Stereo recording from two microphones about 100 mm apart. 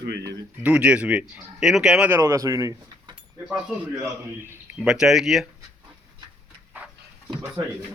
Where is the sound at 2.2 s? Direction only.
35° right (ahead or behind).